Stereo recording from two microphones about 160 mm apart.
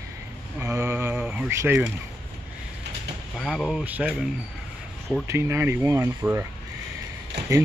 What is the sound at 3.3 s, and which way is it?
Speech, centre (ahead or behind).